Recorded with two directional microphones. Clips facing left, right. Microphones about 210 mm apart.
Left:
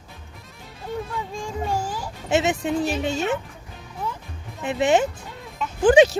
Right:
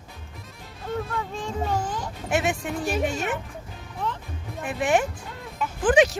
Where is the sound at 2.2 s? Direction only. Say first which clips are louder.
Left 4 dB; 25° left (ahead or behind).